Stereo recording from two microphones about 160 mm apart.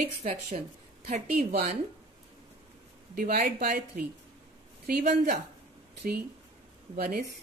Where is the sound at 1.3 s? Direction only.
75° right (ahead or behind).